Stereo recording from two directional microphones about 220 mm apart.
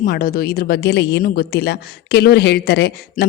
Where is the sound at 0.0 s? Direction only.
40° left (ahead or behind).